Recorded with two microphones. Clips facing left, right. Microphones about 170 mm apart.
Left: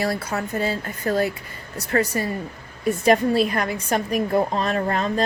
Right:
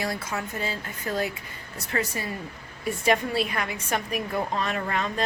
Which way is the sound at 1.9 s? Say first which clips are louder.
Left 7 dB; 50° left (ahead or behind).